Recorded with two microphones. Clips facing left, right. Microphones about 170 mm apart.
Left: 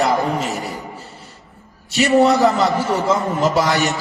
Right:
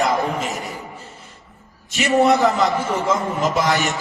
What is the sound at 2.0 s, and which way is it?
A man's voice, 35° left (ahead or behind).